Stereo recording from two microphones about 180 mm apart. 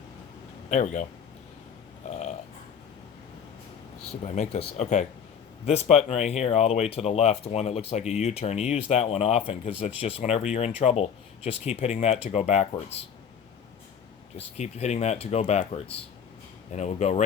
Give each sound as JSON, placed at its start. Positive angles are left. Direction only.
{"t": 0.7, "sound": "speech", "side_deg": 45}
{"t": 2.0, "sound": "a sound", "side_deg": 40}
{"t": 4.2, "sound": "speech", "side_deg": 35}
{"t": 14.3, "sound": "speech", "side_deg": 40}